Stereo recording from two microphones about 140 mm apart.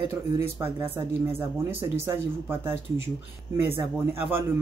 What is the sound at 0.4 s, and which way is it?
Speech, 15° right (ahead or behind).